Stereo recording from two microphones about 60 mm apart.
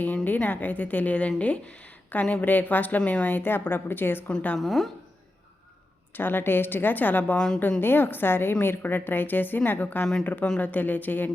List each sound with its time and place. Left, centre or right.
0.0 s a sound: left
0.4 s a woman's voice: left
4.5 s a woman's voice: centre
6.1 s speech: left
7.3 s a woman's voice: centre
7.8 s a woman's voice: left